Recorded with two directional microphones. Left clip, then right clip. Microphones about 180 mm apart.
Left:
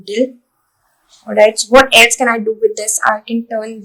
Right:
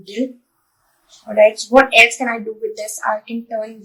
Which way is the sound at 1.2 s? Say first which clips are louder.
Left 2 dB; 45° left (ahead or behind).